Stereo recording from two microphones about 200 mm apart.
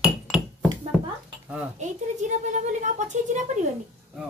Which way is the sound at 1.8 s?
40° right (ahead or behind).